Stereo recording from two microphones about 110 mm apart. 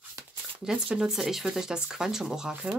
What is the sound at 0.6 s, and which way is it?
Speech, 5° right (ahead or behind).